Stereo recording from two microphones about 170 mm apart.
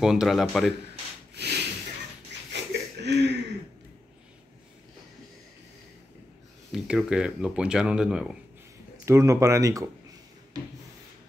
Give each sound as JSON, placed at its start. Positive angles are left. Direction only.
{"t": 0.0, "sound": "speech", "side_deg": -5}
{"t": 1.3, "sound": "snort", "side_deg": -75}
{"t": 2.5, "sound": "a sound", "side_deg": -90}
{"t": 6.7, "sound": "speech", "side_deg": 0}
{"t": 9.0, "sound": "speech", "side_deg": -15}